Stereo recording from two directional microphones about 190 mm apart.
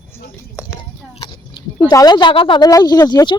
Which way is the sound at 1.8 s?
20° left (ahead or behind).